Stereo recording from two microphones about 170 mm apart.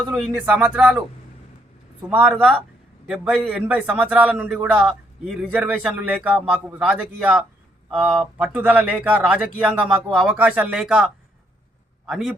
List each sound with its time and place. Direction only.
0.1 s speech: 5° right (ahead or behind)
2.0 s a man's voice: 10° right (ahead or behind)